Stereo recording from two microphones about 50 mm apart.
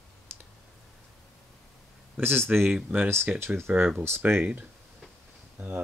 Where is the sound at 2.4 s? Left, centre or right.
Right.